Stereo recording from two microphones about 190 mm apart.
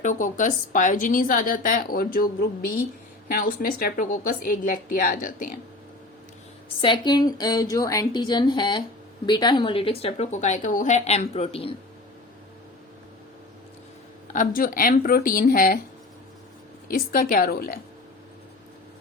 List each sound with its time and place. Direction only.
0.0 s a woman's voice: 40° left (ahead or behind)
6.8 s a woman's voice: 25° left (ahead or behind)
14.3 s a woman's voice: 50° left (ahead or behind)
16.9 s a woman's voice: 50° left (ahead or behind)